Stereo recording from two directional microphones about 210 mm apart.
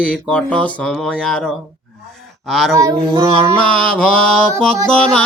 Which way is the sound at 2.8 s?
15° right (ahead or behind).